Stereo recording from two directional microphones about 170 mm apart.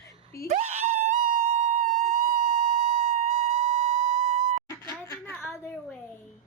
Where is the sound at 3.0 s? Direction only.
40° right (ahead or behind).